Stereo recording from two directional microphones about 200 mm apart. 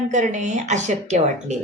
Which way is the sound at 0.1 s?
35° right (ahead or behind).